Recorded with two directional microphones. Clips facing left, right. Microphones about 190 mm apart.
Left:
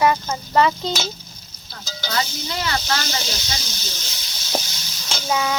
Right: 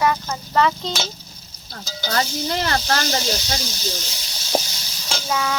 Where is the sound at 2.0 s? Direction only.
45° right (ahead or behind).